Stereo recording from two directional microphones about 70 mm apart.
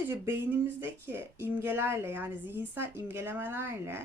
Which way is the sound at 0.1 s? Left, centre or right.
Right.